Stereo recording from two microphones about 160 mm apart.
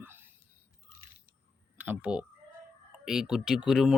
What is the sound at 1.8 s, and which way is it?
A man's voice, 10° right (ahead or behind).